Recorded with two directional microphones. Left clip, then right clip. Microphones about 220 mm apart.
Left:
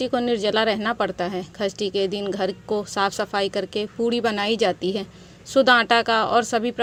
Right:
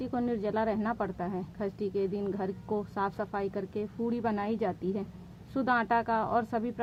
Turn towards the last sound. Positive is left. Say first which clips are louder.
# left 10 dB
turn(degrees=25)  # may be behind; listen again after turning